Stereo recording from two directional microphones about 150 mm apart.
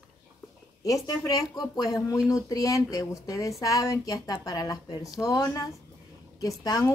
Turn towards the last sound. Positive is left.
turn(degrees=25)  # may be behind; listen again after turning